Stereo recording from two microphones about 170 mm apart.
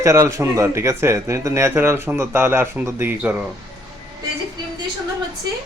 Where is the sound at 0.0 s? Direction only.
15° right (ahead or behind).